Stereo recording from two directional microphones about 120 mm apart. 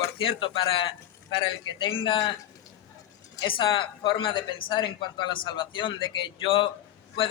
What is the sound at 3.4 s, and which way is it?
A man's voice, 45° left (ahead or behind).